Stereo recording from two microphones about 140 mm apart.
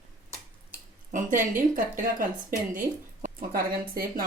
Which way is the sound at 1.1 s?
70° right (ahead or behind).